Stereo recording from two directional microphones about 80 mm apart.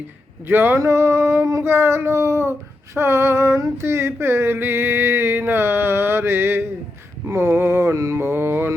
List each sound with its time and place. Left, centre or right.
0.4 s speech: right
0.8 s child singing: right
7.3 s mantra: right